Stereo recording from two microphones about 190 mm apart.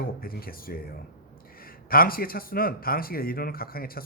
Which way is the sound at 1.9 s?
50° left (ahead or behind).